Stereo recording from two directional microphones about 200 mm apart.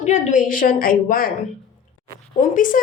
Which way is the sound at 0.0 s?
40° left (ahead or behind).